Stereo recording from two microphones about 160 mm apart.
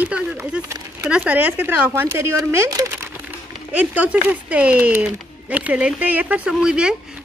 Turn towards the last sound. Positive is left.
turn(degrees=-5)  # may be behind; listen again after turning